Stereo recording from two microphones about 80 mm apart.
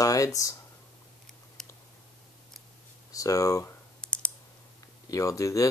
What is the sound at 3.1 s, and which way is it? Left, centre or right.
Speech, left.